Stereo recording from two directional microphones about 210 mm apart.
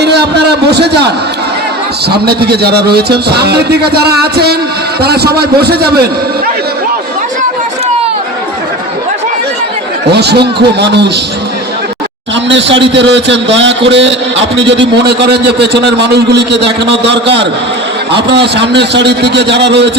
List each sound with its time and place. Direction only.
0.0 s a man's voice: 50° right (ahead or behind)
10.1 s a man's voice: 50° right (ahead or behind)
12.5 s a man's voice: 60° right (ahead or behind)